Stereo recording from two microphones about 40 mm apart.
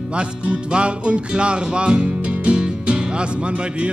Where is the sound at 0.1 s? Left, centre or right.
Right.